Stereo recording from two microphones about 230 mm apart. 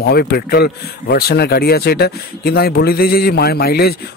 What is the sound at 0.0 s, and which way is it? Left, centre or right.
Speech, left.